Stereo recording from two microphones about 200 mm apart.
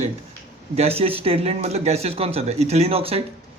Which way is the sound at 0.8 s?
30° right (ahead or behind).